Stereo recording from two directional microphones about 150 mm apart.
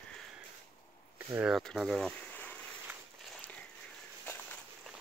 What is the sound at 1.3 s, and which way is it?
Speech, 5° right (ahead or behind).